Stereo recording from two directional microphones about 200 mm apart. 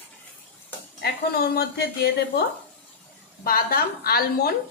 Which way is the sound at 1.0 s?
50° left (ahead or behind).